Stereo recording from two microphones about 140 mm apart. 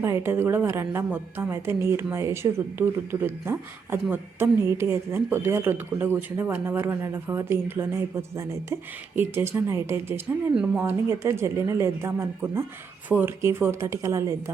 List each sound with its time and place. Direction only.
0.0 s speech: 15° right (ahead or behind)